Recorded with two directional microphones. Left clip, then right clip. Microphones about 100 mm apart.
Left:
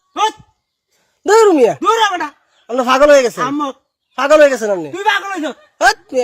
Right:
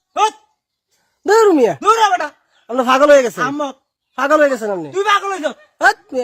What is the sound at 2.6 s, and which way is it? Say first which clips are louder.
Speech: left 1 dB; 40° right (ahead or behind).